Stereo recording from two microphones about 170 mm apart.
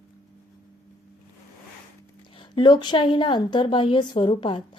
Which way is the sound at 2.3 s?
30° left (ahead or behind).